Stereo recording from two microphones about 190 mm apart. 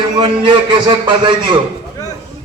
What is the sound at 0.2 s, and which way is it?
A man's voice, 25° right (ahead or behind).